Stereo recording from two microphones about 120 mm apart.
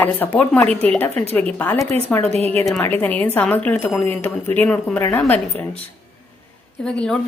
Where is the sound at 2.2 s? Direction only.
60° right (ahead or behind).